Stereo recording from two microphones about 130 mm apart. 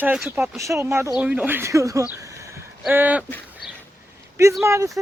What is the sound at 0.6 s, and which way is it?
Speech, 25° right (ahead or behind).